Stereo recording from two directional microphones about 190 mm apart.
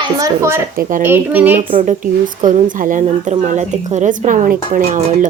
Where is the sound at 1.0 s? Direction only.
10° right (ahead or behind).